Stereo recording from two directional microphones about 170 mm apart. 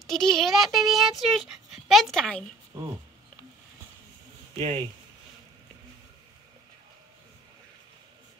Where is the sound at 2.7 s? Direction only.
25° right (ahead or behind).